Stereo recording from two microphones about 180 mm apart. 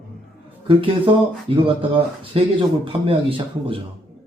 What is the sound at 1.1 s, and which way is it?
Speech, 25° right (ahead or behind).